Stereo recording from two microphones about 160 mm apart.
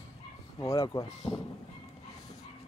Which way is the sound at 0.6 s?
20° left (ahead or behind).